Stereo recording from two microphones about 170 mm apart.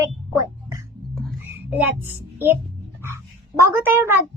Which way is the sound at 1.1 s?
Centre (ahead or behind).